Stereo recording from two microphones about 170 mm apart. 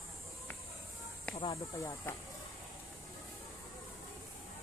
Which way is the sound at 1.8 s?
20° left (ahead or behind).